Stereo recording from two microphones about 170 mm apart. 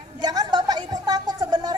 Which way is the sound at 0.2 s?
25° right (ahead or behind).